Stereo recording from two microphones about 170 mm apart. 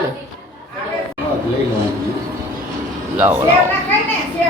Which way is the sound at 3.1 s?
15° right (ahead or behind).